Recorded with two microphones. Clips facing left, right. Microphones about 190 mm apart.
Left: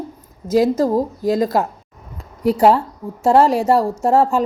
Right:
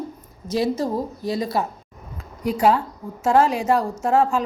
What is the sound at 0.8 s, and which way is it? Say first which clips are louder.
Mantra: left 7 dB; 40° left (ahead or behind).